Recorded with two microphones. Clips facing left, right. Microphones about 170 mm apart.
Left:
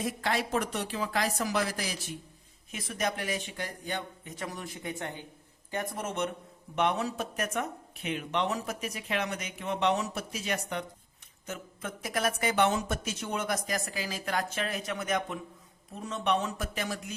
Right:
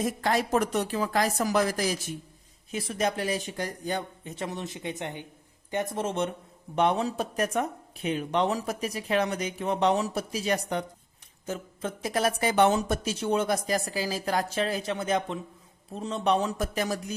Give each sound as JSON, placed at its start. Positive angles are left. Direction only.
{"t": 0.0, "sound": "speech", "side_deg": -45}
{"t": 2.7, "sound": "speech", "side_deg": -30}